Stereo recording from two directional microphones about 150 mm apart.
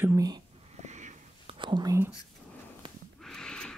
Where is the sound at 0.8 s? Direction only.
50° right (ahead or behind).